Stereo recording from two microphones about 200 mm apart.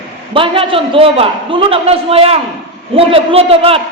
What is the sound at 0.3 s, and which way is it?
A man's voice, 25° right (ahead or behind).